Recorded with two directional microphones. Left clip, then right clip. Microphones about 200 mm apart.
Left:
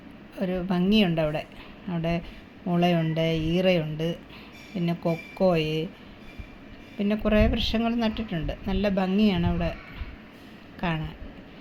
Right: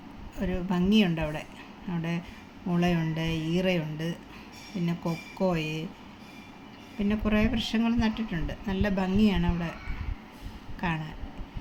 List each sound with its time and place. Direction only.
0.3 s a woman's voice: 20° left (ahead or behind)
7.0 s a woman's voice: 25° left (ahead or behind)
10.8 s speech: 20° left (ahead or behind)